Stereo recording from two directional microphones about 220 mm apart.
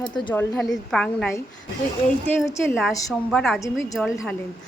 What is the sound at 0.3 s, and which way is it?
Speech, 5° left (ahead or behind).